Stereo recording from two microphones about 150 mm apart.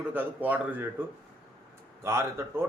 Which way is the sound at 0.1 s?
10° right (ahead or behind).